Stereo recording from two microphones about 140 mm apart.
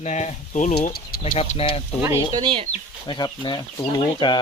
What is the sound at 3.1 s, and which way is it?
Speech, 30° left (ahead or behind).